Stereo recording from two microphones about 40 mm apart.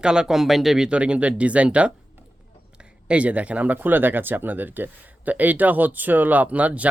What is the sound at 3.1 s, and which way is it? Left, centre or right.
Speech, right.